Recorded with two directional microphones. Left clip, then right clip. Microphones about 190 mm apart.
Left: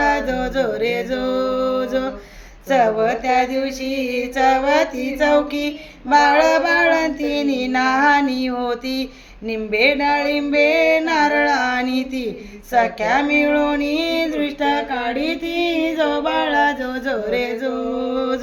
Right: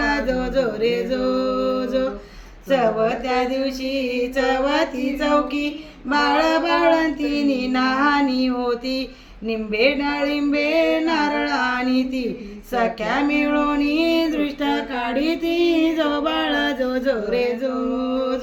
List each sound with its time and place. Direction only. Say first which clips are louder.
0.0 s music: left 3 dB; 20° left (ahead or behind)
2.6 s female singing: left 3 dB; 25° left (ahead or behind)
18.1 s music: left 2 dB; 25° left (ahead or behind)